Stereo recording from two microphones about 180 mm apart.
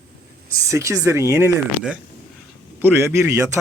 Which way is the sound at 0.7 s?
15° right (ahead or behind).